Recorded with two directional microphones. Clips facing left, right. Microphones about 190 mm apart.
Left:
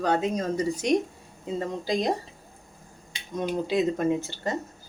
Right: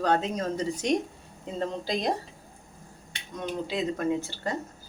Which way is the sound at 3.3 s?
20° left (ahead or behind).